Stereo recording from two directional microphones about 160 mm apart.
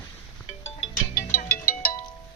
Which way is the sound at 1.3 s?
65° left (ahead or behind).